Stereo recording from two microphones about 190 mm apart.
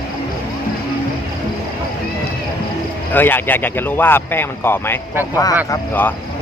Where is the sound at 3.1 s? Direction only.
10° left (ahead or behind).